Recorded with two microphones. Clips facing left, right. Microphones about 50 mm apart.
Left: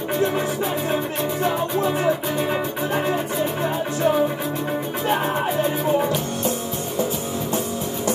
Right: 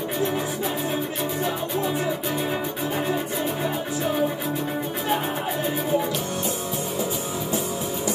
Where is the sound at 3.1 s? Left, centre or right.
Left.